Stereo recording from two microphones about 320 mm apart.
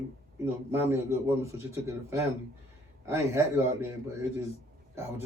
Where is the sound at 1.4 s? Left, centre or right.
Centre.